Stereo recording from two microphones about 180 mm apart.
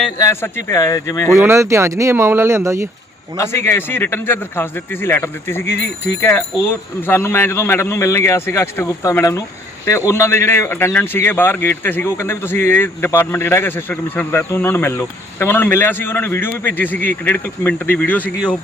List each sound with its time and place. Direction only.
0.2 s speech: 15° left (ahead or behind)
1.3 s speech: 15° right (ahead or behind)
3.3 s speech: 15° left (ahead or behind)